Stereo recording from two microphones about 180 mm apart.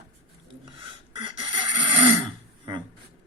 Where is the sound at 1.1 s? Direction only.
25° right (ahead or behind).